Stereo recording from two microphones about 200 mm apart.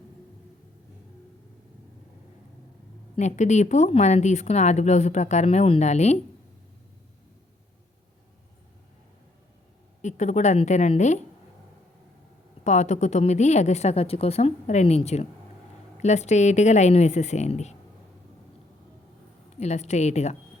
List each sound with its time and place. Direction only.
3.2 s speech: 35° left (ahead or behind)
10.0 s speech: 35° left (ahead or behind)
12.6 s speech: 35° left (ahead or behind)
19.5 s speech: 35° left (ahead or behind)